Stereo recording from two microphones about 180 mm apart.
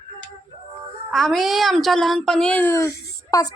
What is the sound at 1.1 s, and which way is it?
A woman's voice, centre (ahead or behind).